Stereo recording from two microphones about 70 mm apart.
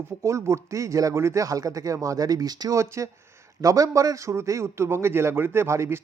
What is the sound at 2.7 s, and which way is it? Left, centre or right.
A man's voice, right.